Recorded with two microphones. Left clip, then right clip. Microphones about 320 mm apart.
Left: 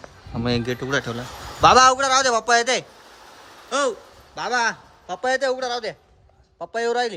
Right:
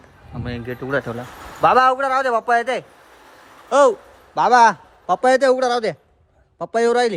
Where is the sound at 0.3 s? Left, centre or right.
Centre.